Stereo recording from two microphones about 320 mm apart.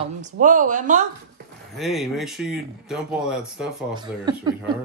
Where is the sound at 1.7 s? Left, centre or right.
Centre.